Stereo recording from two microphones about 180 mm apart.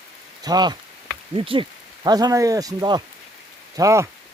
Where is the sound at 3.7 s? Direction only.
15° right (ahead or behind).